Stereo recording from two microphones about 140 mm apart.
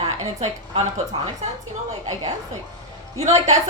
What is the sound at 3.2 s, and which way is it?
Speech, 50° right (ahead or behind).